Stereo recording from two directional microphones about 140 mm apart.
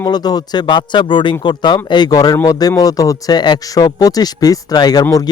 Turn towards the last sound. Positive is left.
turn(degrees=25)  # may be behind; listen again after turning